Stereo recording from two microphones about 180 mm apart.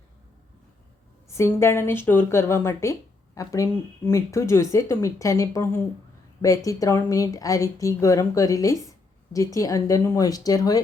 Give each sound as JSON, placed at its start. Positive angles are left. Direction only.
{"t": 1.3, "sound": "speech", "side_deg": 15}